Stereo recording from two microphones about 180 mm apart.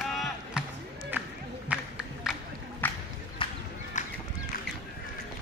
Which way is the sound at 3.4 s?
30° left (ahead or behind).